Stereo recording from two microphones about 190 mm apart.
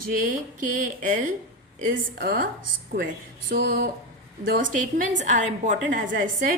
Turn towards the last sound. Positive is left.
turn(degrees=-45)  # may be behind; listen again after turning